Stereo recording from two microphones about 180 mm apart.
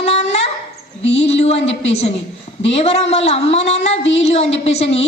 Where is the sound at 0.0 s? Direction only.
35° left (ahead or behind).